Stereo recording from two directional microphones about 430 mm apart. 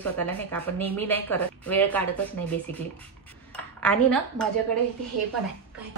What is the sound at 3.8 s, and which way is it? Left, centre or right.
Speech, centre.